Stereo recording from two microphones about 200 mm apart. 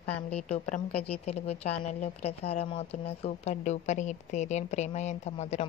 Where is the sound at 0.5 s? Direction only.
40° left (ahead or behind).